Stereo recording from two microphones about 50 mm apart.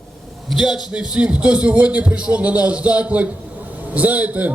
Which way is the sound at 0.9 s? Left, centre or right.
Right.